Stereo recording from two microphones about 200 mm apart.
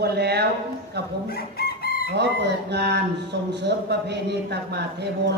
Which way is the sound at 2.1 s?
55° right (ahead or behind).